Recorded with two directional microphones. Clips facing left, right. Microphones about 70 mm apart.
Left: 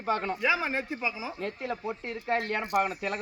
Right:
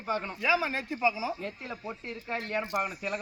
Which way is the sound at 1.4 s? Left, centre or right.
Left.